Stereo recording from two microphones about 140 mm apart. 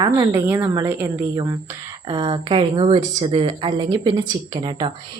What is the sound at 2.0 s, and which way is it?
A woman's voice, 35° right (ahead or behind).